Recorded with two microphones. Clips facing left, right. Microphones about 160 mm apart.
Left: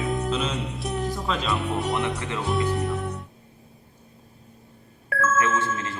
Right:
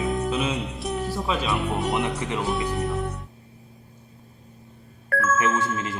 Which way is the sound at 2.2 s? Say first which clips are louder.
Right 2 dB; 20° right (ahead or behind).